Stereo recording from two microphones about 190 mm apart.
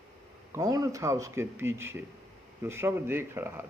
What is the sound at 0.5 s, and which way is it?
Speech, 20° right (ahead or behind).